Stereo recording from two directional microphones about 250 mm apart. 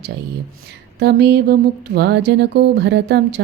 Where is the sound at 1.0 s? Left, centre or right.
Right.